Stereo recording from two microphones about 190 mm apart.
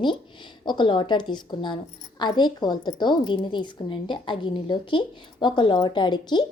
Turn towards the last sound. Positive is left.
turn(degrees=25)  # may be behind; listen again after turning